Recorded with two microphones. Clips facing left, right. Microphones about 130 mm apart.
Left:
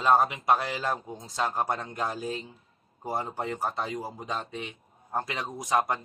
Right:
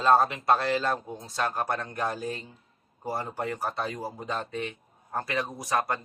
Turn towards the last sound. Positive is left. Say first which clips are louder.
# left 2 dB
turn(degrees=15)  # may be behind; listen again after turning